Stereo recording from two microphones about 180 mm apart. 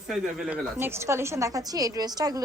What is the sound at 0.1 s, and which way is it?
A woman's voice, 5° right (ahead or behind).